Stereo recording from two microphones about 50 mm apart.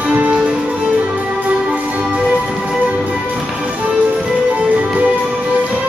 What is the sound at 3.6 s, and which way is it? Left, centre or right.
Music, right.